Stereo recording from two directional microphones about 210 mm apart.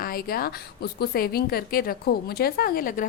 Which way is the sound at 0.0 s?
45° left (ahead or behind).